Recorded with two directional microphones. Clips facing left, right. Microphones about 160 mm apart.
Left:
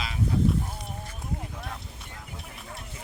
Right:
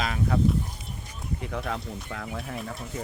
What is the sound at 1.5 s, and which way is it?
Speech, 90° right.